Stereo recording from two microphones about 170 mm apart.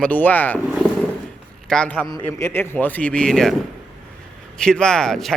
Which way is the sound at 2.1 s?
15° left (ahead or behind).